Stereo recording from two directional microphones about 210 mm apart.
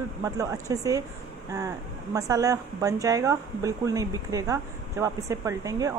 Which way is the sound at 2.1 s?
15° right (ahead or behind).